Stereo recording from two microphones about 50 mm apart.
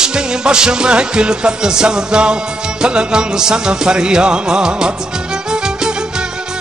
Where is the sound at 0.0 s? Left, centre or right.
Centre.